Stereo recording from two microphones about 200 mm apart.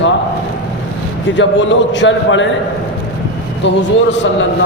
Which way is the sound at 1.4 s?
65° left (ahead or behind).